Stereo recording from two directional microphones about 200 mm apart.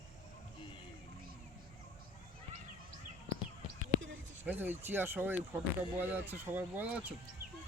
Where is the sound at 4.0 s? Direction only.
75° right (ahead or behind).